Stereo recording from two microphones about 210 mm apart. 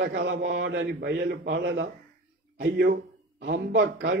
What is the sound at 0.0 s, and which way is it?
A man's voice, 50° right (ahead or behind).